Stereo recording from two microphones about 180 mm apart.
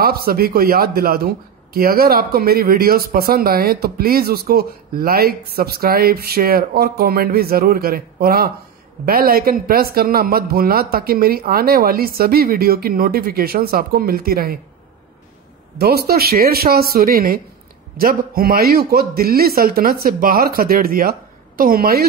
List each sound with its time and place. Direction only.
0.0 s a man's voice: 55° right (ahead or behind)
15.8 s a man's voice: 60° right (ahead or behind)